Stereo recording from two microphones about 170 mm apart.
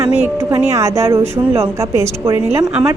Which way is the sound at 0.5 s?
15° right (ahead or behind).